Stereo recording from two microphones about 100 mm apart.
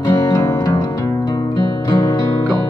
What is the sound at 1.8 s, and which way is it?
Music, 35° left (ahead or behind).